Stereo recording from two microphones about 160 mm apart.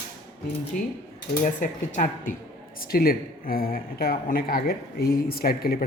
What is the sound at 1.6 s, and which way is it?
Speech, 55° left (ahead or behind).